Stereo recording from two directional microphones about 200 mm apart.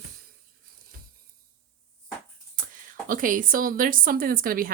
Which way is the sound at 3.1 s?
40° right (ahead or behind).